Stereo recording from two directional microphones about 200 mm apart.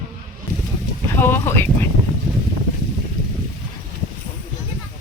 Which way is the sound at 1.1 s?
10° left (ahead or behind).